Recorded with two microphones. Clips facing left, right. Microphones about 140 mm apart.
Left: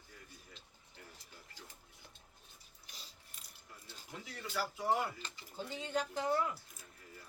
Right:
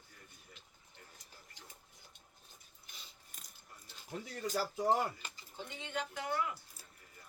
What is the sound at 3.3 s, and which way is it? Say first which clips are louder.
Mechanisms: right 2 dB; 45° right (ahead or behind).